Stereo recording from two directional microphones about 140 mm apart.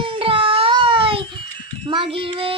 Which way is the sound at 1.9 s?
40° right (ahead or behind).